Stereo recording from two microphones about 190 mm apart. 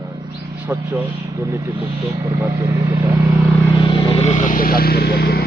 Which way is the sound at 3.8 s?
30° left (ahead or behind).